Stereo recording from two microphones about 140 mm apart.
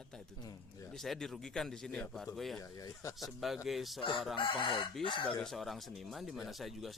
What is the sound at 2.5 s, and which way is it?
Speech, 25° left (ahead or behind).